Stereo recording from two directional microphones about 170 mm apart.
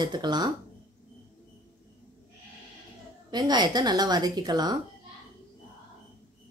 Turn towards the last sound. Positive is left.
turn(degrees=-25)  # may be behind; listen again after turning